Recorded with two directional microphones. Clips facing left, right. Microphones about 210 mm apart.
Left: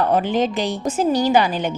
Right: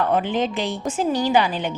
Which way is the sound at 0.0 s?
40° left (ahead or behind).